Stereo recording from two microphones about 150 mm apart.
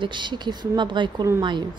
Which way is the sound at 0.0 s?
30° right (ahead or behind).